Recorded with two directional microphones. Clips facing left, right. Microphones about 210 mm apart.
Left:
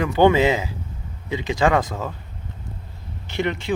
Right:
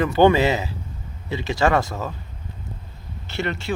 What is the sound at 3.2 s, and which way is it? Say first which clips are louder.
Speech: left 2 dB; 15° left (ahead or behind).